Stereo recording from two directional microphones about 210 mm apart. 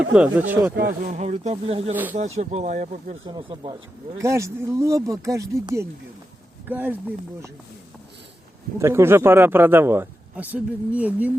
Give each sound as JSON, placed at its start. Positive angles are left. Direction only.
{"t": 0.1, "sound": "a man's voice", "side_deg": -5}
{"t": 1.0, "sound": "speech", "side_deg": -35}
{"t": 3.2, "sound": "a man's voice", "side_deg": -20}
{"t": 8.8, "sound": "a man's voice", "side_deg": -10}